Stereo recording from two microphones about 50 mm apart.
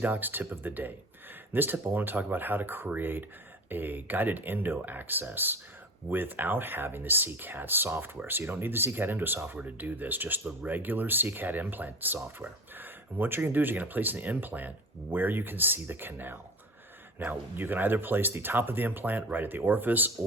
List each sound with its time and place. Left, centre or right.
0.0 s speech: right